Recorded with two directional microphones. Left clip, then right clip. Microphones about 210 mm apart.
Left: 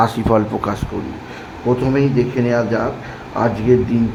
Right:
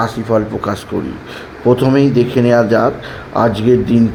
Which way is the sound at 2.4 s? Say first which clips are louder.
Right 8 dB; 20° right (ahead or behind).